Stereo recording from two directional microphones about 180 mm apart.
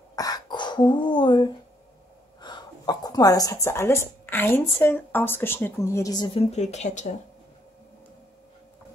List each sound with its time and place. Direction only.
0.1 s throat clearing: 20° left (ahead or behind)
2.4 s speech: 25° left (ahead or behind)
6.5 s speech: 40° left (ahead or behind)